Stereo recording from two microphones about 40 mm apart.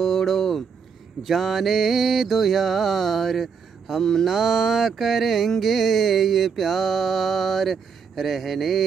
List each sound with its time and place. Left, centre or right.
0.0 s a sound: centre
1.2 s mantra: centre
4.3 s mantra: centre